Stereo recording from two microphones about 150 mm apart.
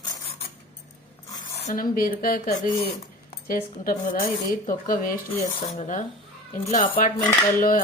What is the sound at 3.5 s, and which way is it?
A woman's voice, 65° left (ahead or behind).